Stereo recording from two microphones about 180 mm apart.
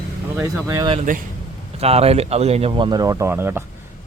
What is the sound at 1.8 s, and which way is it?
Speech, 35° right (ahead or behind).